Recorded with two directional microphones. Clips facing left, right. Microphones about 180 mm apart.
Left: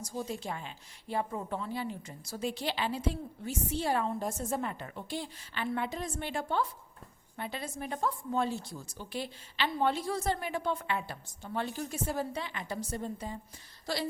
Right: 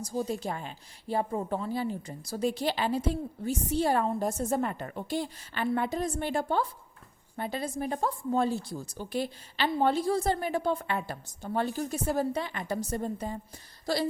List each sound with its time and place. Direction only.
0.0 s a woman's voice: 35° right (ahead or behind)